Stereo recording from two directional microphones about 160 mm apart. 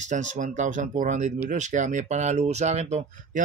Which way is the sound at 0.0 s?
50° right (ahead or behind).